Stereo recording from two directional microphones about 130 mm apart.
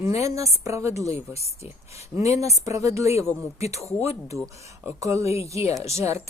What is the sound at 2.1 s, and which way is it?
Speech, 25° right (ahead or behind).